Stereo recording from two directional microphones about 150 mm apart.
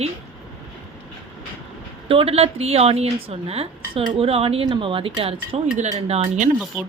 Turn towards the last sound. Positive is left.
turn(degrees=-10)  # may be behind; listen again after turning